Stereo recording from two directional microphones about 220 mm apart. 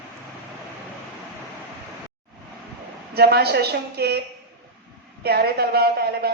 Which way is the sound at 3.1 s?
45° right (ahead or behind).